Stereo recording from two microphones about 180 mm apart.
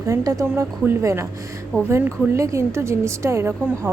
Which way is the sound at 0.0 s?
20° right (ahead or behind).